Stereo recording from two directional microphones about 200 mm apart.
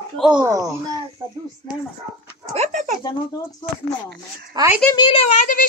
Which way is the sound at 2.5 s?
35° right (ahead or behind).